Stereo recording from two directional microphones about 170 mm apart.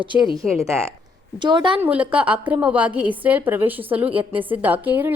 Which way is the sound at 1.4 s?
25° right (ahead or behind).